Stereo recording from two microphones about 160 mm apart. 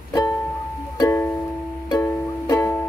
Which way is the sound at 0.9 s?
15° left (ahead or behind).